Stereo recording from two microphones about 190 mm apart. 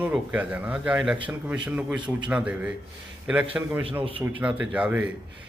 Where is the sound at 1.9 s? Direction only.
25° right (ahead or behind).